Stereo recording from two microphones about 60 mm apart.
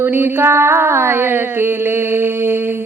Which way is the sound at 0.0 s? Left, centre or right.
Right.